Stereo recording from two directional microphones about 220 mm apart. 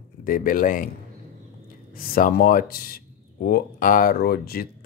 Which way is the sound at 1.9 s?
40° left (ahead or behind).